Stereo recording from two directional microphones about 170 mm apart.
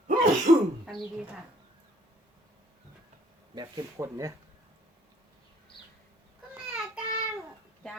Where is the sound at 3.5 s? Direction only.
20° right (ahead or behind).